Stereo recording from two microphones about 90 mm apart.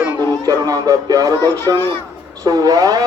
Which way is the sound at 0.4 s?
40° right (ahead or behind).